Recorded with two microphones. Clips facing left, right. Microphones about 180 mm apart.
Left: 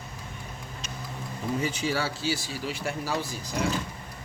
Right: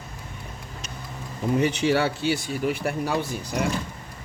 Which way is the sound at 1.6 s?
65° right (ahead or behind).